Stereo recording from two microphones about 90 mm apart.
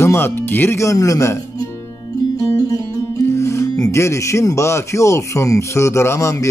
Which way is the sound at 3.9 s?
30° left (ahead or behind).